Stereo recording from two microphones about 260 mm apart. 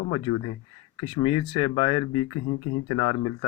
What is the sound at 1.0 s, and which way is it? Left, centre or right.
Speech, centre.